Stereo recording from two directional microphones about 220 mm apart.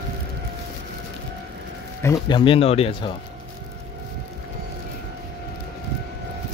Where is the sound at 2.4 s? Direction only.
25° left (ahead or behind).